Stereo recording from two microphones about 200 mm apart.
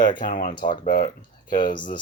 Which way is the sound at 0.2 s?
45° left (ahead or behind).